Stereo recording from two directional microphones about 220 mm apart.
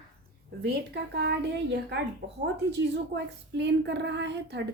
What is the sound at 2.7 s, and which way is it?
Speech, 50° right (ahead or behind).